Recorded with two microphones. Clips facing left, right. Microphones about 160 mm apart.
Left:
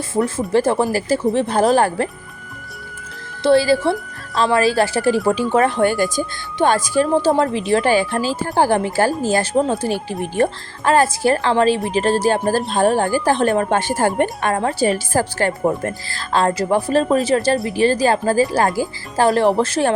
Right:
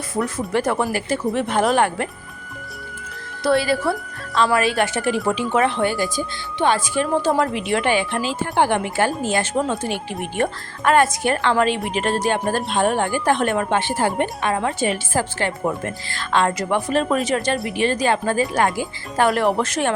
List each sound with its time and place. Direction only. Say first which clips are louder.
0.3 s speech: left 4 dB; 30° left (ahead or behind)
3.4 s speech: left 5 dB; 30° left (ahead or behind)